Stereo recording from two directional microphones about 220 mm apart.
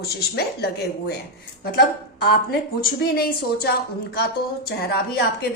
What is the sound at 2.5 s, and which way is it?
A woman's voice, 40° left (ahead or behind).